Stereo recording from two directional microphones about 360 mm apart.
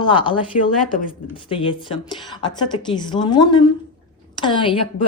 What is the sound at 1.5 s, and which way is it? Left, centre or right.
A woman's voice, centre.